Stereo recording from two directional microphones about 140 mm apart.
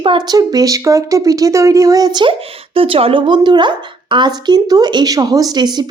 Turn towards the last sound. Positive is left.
turn(degrees=-30)  # may be behind; listen again after turning